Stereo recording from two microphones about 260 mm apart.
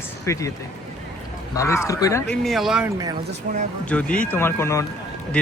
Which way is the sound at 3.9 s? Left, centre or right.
Centre.